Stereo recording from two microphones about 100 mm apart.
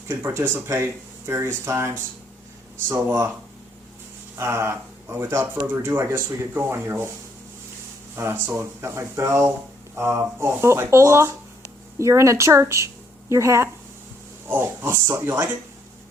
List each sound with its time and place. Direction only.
0.1 s speech: 20° right (ahead or behind)
2.9 s speech: 25° right (ahead or behind)
4.4 s speech: 25° right (ahead or behind)
8.1 s a woman's voice: 25° right (ahead or behind)
14.4 s oink: 20° right (ahead or behind)